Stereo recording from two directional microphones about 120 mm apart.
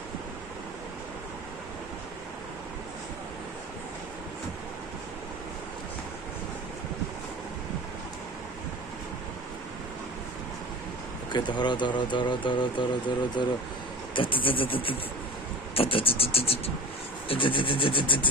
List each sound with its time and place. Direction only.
11.3 s speech: 40° left (ahead or behind)
15.7 s sawing: 50° left (ahead or behind)